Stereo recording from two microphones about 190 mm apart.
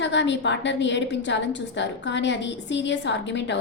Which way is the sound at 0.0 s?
70° left (ahead or behind).